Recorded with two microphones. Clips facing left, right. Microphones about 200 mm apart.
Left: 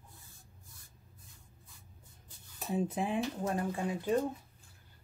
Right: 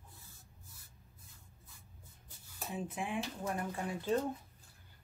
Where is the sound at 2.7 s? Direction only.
30° left (ahead or behind); by 4.3 s 15° left (ahead or behind).